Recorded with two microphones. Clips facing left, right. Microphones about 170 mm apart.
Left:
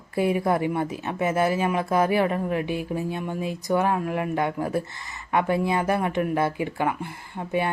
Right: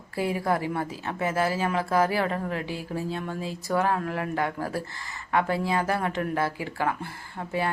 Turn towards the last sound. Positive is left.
turn(degrees=20)  # may be behind; listen again after turning